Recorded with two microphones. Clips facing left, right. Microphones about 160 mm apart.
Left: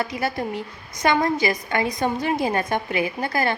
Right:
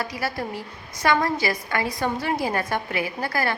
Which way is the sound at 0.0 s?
20° left (ahead or behind).